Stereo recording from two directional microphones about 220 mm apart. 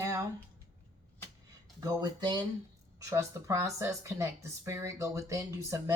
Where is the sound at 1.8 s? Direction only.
15° right (ahead or behind).